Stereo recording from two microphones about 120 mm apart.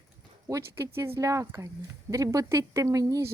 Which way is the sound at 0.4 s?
25° right (ahead or behind).